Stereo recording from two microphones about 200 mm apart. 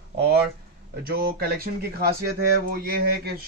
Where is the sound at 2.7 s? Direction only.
50° right (ahead or behind).